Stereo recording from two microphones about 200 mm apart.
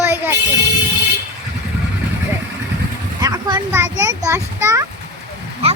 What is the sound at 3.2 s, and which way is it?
A child's voice, 15° right (ahead or behind).